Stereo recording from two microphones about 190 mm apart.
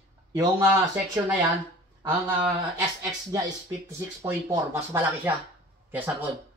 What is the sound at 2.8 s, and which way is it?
Speech, 20° right (ahead or behind).